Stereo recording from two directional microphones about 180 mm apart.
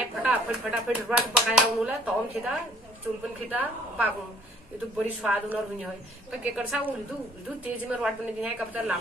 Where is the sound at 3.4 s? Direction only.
10° right (ahead or behind).